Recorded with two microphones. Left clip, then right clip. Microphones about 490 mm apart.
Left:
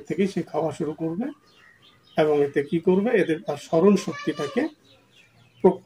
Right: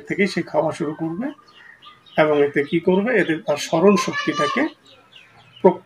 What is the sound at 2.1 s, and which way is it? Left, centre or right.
Speech, left.